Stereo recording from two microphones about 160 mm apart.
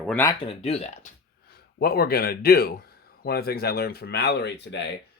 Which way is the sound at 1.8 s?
75° left (ahead or behind).